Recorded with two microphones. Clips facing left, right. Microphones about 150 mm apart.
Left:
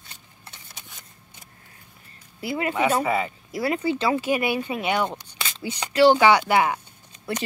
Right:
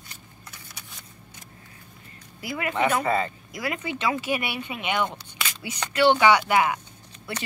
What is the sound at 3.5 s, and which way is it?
Speech, 35° left (ahead or behind).